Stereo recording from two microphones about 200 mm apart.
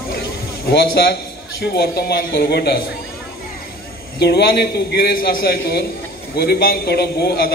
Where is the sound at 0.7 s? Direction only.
50° left (ahead or behind).